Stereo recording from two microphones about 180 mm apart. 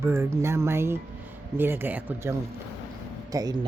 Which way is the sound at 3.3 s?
20° right (ahead or behind).